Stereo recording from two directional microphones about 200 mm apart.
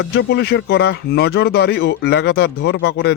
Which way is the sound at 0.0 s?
55° left (ahead or behind).